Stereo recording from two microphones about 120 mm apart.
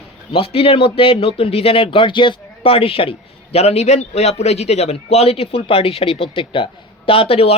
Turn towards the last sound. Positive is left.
turn(degrees=55)  # may be behind; listen again after turning